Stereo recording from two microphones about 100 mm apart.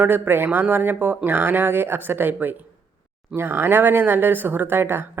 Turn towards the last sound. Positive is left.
turn(degrees=-20)  # may be behind; listen again after turning